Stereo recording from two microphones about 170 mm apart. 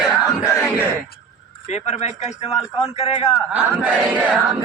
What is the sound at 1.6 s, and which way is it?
A man's voice, 40° left (ahead or behind).